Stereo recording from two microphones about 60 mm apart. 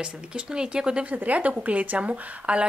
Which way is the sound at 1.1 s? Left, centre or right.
Right.